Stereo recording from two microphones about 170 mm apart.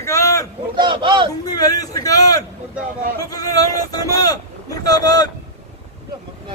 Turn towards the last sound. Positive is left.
turn(degrees=20)  # may be behind; listen again after turning